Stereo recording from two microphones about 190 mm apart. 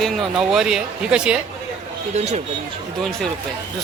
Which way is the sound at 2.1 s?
35° right (ahead or behind).